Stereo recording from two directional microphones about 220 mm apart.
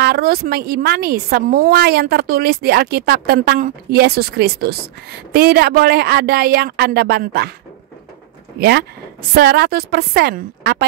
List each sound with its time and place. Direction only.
0.0 s a woman's voice: 45° right (ahead or behind)
8.5 s a woman's voice: 50° right (ahead or behind)